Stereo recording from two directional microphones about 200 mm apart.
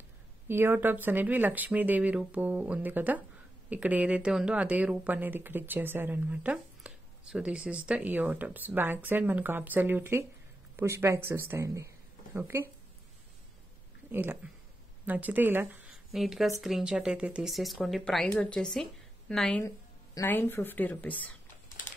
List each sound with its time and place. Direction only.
0.5 s speech: 10° right (ahead or behind)
14.1 s speech: 10° right (ahead or behind); by 21.3 s 10° left (ahead or behind)